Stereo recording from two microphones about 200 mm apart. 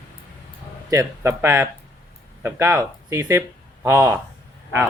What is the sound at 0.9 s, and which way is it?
Speech, 15° right (ahead or behind).